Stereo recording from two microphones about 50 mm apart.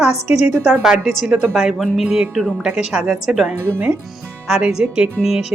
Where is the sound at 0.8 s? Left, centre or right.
Centre.